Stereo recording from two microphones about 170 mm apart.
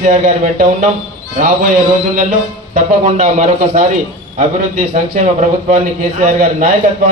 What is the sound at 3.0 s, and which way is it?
Speech, 45° right (ahead or behind).